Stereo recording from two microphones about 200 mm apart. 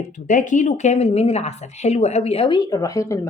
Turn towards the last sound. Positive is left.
turn(degrees=15)  # may be behind; listen again after turning